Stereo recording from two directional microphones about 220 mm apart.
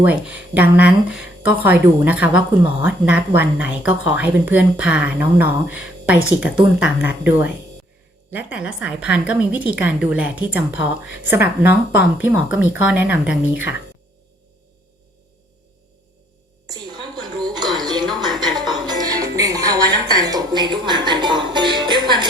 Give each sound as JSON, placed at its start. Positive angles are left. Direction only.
{"t": 0.0, "sound": "a woman's voice", "side_deg": -5}
{"t": 16.7, "sound": "a sound", "side_deg": -20}
{"t": 17.7, "sound": "music", "side_deg": -20}